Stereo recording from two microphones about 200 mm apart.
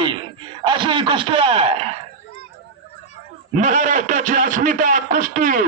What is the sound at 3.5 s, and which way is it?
A man's voice, 40° right (ahead or behind).